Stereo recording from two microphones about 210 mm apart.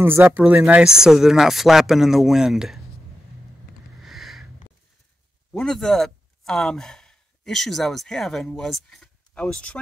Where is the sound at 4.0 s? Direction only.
Centre (ahead or behind).